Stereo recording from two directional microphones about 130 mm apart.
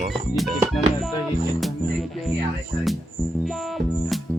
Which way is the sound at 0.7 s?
Centre (ahead or behind).